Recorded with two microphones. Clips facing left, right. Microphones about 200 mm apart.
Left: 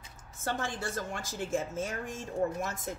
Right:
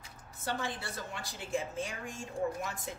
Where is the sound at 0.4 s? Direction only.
45° left (ahead or behind).